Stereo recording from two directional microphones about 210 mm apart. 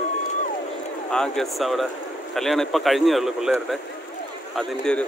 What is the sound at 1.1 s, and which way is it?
Speech, 5° left (ahead or behind).